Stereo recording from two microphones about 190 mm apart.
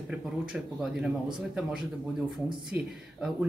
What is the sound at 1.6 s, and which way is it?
Speech, centre (ahead or behind).